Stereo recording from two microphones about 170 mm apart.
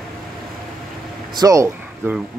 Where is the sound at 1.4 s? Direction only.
20° right (ahead or behind).